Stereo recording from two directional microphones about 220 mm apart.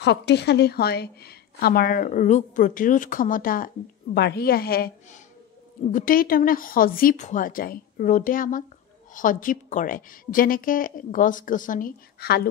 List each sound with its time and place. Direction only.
0.0 s a woman's voice: 50° left (ahead or behind)